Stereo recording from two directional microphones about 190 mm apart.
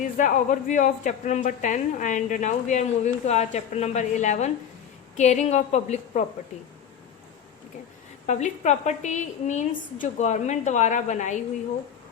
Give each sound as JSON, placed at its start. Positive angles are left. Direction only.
{"t": 0.0, "sound": "speech", "side_deg": 40}
{"t": 8.3, "sound": "speech", "side_deg": 40}